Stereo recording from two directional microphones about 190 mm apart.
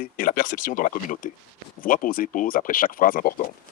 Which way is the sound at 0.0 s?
45° left (ahead or behind).